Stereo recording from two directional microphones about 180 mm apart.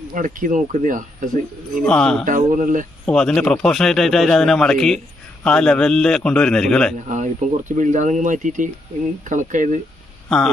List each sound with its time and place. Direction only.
0.1 s speech: 45° right (ahead or behind)
1.8 s a man's voice: 5° left (ahead or behind)
2.2 s speech: 45° right (ahead or behind)
3.1 s a man's voice: 5° left (ahead or behind)
7.1 s speech: 45° right (ahead or behind)